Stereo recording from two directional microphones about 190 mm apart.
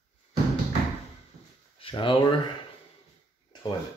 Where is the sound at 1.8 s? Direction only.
25° left (ahead or behind).